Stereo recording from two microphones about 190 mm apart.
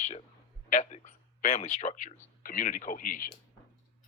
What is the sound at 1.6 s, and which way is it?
Speech, 35° left (ahead or behind).